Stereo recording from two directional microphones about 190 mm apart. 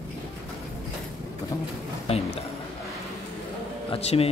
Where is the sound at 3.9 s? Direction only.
30° left (ahead or behind).